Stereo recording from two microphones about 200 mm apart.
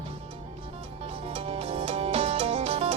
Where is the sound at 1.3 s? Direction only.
30° right (ahead or behind).